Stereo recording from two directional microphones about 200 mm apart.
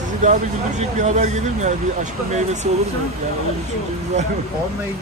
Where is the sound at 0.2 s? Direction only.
35° right (ahead or behind).